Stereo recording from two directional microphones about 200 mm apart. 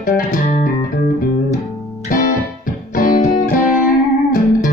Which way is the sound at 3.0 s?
40° left (ahead or behind).